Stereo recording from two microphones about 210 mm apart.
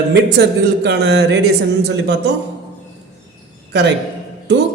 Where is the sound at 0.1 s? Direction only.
55° right (ahead or behind).